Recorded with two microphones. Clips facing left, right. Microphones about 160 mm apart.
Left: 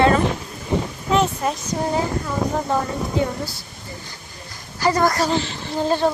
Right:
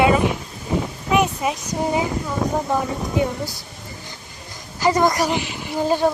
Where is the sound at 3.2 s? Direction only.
20° right (ahead or behind).